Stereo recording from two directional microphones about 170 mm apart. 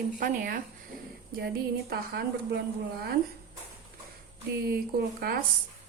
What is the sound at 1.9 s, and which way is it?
Speech, 70° right (ahead or behind).